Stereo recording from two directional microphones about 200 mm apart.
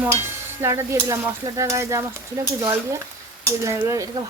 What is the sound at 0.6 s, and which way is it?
Speech, 15° right (ahead or behind).